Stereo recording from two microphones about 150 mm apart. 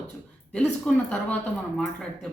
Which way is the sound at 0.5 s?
5° left (ahead or behind).